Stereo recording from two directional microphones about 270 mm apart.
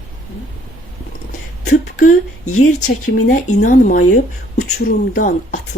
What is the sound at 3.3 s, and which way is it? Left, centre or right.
Speech, left.